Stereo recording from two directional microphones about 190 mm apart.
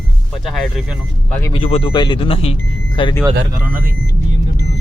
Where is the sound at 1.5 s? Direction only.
30° left (ahead or behind).